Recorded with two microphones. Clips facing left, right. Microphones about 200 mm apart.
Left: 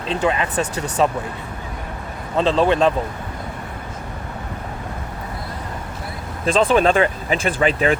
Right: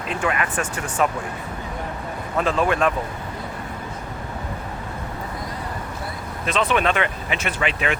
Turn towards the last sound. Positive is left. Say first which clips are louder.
# left 6 dB
turn(degrees=35)  # may be behind; listen again after turning